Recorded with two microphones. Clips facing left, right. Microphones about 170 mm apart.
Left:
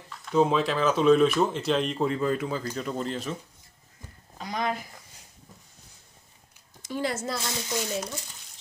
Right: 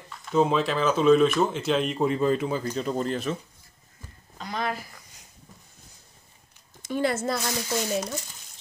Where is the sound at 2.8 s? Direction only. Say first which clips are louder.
Right 3 dB; 40° right (ahead or behind).